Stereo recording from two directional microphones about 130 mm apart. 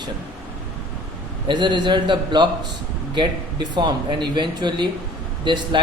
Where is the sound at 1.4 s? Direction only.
35° right (ahead or behind).